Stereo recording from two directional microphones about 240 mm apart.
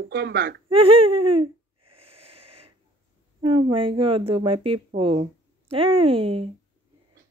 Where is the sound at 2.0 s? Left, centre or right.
Right.